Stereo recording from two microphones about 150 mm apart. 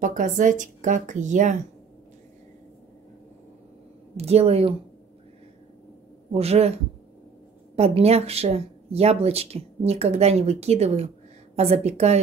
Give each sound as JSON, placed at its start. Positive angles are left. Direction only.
{"t": 0.0, "sound": "speech", "side_deg": -60}
{"t": 4.2, "sound": "speech", "side_deg": -45}
{"t": 6.3, "sound": "speech", "side_deg": -45}